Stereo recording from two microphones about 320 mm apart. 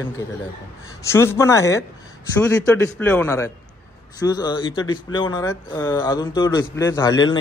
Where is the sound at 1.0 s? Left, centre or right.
Centre.